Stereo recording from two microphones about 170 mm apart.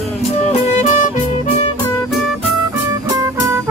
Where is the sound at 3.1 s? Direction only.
15° right (ahead or behind).